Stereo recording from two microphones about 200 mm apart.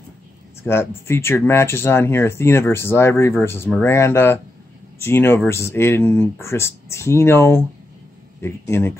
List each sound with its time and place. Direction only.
0.7 s speech: 10° left (ahead or behind)